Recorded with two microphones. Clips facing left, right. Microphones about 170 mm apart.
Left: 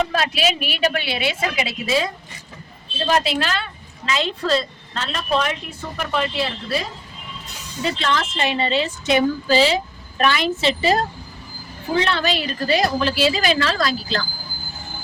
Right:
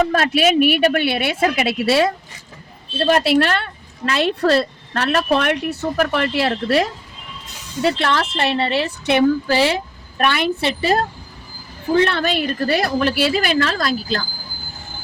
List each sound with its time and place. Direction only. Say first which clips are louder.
0.0 s a woman's voice: right 5 dB; 55° right (ahead or behind); by 6.9 s 80° right
7.8 s a woman's voice: right 4 dB; 65° right (ahead or behind)
12.0 s a woman's voice: right 2 dB; 55° right (ahead or behind)